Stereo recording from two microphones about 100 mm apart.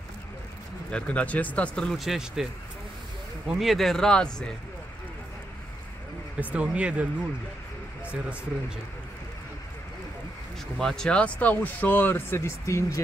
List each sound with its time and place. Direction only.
0.9 s speech: 15° left (ahead or behind)
2.0 s speech: 5° right (ahead or behind)
3.4 s speech: centre (ahead or behind)
6.4 s speech: 10° right (ahead or behind)
10.8 s speech: 5° left (ahead or behind); by 13.0 s 30° left (ahead or behind)